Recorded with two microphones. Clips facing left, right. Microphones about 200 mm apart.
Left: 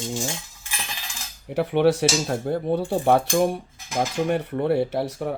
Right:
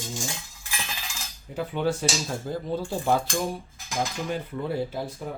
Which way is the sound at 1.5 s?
70° left (ahead or behind).